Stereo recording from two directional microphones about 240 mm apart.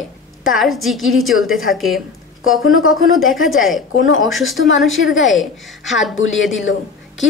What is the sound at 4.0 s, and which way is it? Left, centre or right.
A woman's voice, left.